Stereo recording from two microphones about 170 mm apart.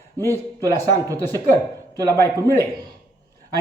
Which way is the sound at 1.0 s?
20° right (ahead or behind).